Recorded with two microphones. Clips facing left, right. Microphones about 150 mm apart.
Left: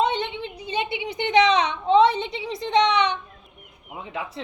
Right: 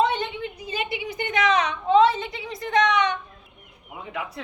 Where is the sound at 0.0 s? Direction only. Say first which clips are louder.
Even; 25° left (ahead or behind).